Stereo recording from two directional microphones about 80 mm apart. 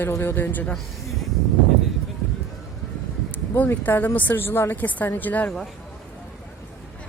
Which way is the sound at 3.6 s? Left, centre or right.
Left.